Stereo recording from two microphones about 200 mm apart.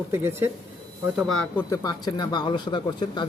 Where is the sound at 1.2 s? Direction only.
Centre (ahead or behind).